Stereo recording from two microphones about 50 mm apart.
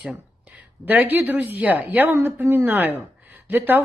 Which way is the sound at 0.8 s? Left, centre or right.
Right.